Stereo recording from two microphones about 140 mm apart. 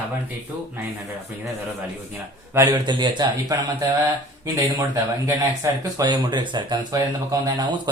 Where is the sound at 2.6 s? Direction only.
30° right (ahead or behind).